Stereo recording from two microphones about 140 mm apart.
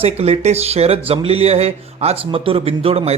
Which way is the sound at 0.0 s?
45° right (ahead or behind).